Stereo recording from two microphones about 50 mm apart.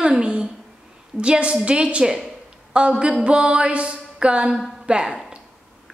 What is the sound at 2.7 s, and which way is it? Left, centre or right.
Speech, centre.